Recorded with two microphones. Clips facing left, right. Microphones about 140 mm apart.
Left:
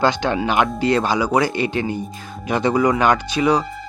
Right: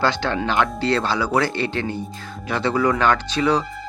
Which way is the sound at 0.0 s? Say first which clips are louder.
Left 3 dB; 15° left (ahead or behind).